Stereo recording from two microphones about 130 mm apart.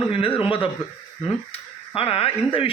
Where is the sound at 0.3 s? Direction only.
45° left (ahead or behind).